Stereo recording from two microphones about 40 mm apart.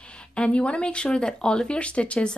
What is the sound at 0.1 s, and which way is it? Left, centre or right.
A woman's voice, left.